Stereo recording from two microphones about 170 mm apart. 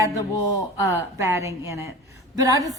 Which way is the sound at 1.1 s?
15° right (ahead or behind).